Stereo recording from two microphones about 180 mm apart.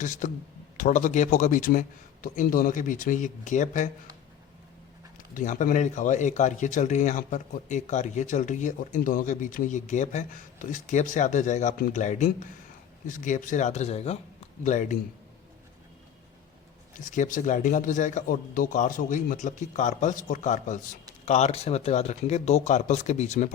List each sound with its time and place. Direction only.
0.0 s speech: 45° left (ahead or behind)
5.3 s speech: 45° left (ahead or behind)
16.9 s speech: 45° left (ahead or behind)